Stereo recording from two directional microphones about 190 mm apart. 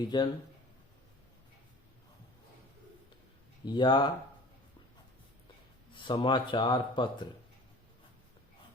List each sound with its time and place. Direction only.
0.1 s speech: 20° left (ahead or behind)
3.7 s speech: 25° left (ahead or behind)
5.9 s speech: 25° left (ahead or behind)